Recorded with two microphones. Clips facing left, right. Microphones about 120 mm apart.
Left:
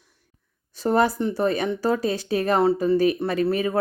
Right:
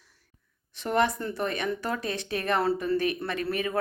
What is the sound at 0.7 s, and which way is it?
Speech, 35° left (ahead or behind).